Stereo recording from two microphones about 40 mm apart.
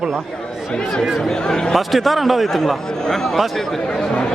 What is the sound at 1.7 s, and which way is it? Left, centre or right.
A man's voice, centre.